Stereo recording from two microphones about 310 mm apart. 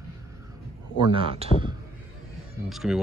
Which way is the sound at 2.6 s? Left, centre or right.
Centre.